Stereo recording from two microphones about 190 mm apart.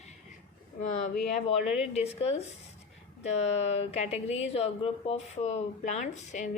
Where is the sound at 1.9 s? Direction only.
35° left (ahead or behind).